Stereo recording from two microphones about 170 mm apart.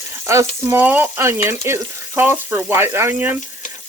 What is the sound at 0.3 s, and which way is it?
Speech, 15° right (ahead or behind).